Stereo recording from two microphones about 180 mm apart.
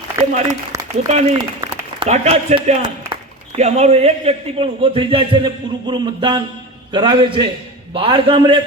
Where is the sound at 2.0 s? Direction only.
40° right (ahead or behind).